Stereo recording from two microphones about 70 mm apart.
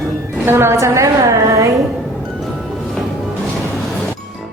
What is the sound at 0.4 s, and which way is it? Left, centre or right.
A woman's voice, right.